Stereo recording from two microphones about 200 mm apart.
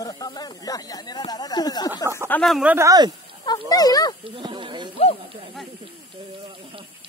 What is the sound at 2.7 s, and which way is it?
Speech, 20° right (ahead or behind).